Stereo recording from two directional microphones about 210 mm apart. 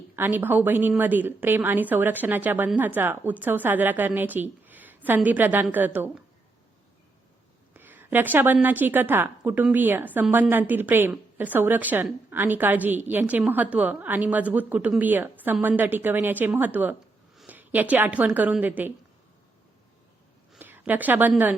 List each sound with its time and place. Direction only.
0.2 s a woman's voice: 10° right (ahead or behind)
7.7 s a woman's voice: 10° right (ahead or behind)
20.5 s a woman's voice: 10° right (ahead or behind)